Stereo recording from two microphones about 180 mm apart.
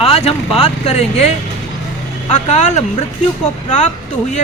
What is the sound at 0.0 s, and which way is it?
Speech, 35° left (ahead or behind).